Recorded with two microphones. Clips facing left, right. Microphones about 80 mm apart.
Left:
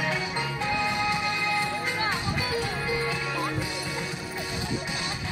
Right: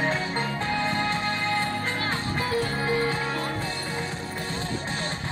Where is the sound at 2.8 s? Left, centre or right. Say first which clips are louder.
Right 4 dB; right.